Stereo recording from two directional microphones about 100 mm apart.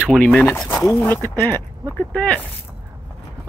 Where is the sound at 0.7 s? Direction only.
30° left (ahead or behind); by 2.4 s 15° left (ahead or behind).